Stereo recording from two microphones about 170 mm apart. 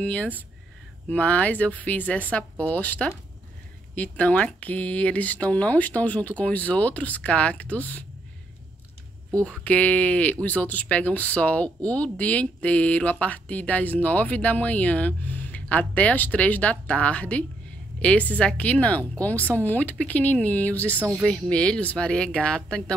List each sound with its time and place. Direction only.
0.0 s speech: 10° left (ahead or behind)
9.4 s speech: 10° left (ahead or behind)
19.3 s speech: 15° right (ahead or behind)
19.6 s speech: 10° left (ahead or behind)
21.0 s speech: 10° right (ahead or behind)
21.3 s speech: 5° left (ahead or behind)